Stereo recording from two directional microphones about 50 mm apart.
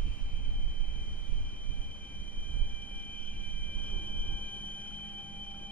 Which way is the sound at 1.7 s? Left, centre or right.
Left.